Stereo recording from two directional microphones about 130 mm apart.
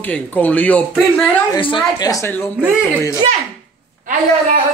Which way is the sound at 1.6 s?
40° left (ahead or behind).